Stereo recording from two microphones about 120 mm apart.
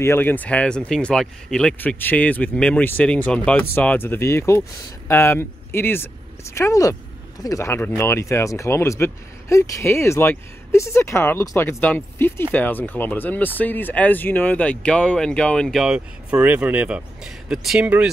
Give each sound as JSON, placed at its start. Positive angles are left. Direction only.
{"t": 0.0, "sound": "speech", "side_deg": 20}
{"t": 1.8, "sound": "speech", "side_deg": 15}